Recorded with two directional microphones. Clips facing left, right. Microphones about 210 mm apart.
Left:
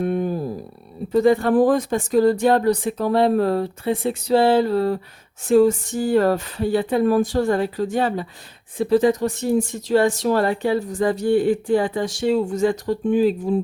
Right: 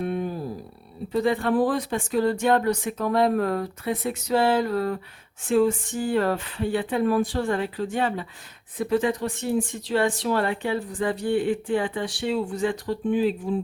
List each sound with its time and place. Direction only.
0.0 s a sound: 45° left (ahead or behind)
1.1 s speech: 45° left (ahead or behind)
5.4 s speech: 40° left (ahead or behind)